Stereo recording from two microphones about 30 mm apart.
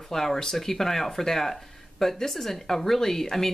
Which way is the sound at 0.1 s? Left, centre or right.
Centre.